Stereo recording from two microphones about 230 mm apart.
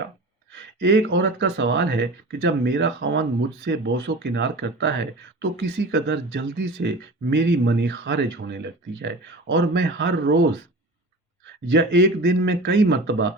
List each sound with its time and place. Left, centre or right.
0.5 s speech: right
11.7 s speech: right